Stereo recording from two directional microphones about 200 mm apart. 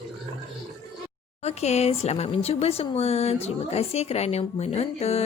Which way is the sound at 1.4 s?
30° left (ahead or behind).